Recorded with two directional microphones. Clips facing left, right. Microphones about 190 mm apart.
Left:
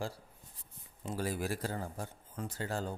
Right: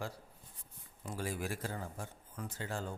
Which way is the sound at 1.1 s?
40° left (ahead or behind).